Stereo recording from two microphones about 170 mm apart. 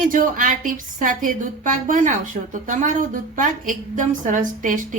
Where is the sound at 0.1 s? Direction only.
50° right (ahead or behind).